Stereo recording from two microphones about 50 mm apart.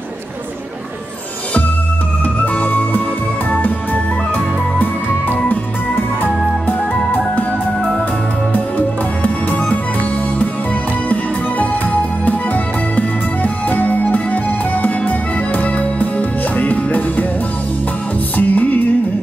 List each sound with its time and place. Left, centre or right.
2.4 s music: left
11.1 s music: left
18.3 s music: left